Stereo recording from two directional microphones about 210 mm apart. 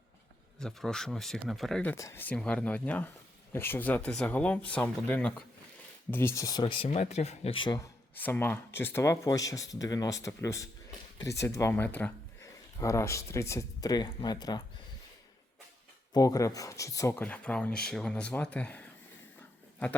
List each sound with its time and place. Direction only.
0.6 s speech: 5° left (ahead or behind); by 7.9 s 20° left (ahead or behind)
8.1 s speech: 10° left (ahead or behind)
16.1 s speech: 15° left (ahead or behind)